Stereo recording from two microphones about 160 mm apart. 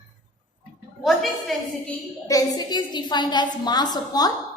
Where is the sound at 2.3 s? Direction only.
20° left (ahead or behind).